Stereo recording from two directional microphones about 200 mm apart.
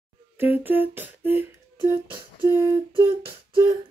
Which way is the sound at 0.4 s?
10° right (ahead or behind).